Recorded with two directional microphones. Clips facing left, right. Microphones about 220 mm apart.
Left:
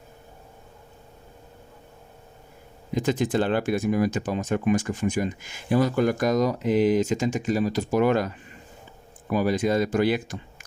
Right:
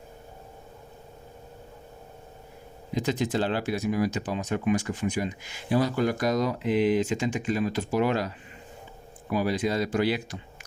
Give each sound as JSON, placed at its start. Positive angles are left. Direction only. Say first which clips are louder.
{"t": 2.9, "sound": "speech", "louder": "left 3 dB", "side_deg": 50}
{"t": 9.3, "sound": "speech", "louder": "left 4 dB", "side_deg": 45}